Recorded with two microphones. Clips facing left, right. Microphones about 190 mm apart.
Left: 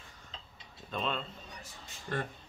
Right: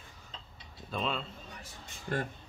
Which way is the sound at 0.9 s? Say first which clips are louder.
Right 1 dB; centre (ahead or behind).